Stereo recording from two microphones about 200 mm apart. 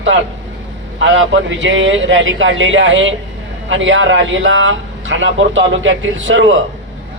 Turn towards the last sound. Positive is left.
turn(degrees=-70)  # may be behind; listen again after turning